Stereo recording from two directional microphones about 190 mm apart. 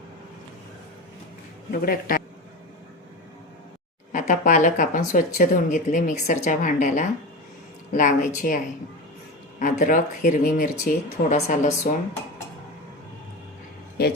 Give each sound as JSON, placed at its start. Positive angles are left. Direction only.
{"t": 1.7, "sound": "speech", "side_deg": 50}
{"t": 4.1, "sound": "speech", "side_deg": 40}